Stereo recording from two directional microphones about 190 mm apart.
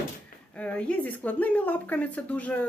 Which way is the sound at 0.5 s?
5° left (ahead or behind).